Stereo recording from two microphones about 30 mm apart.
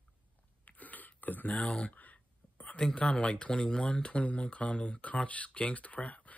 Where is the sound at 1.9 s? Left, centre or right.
Left.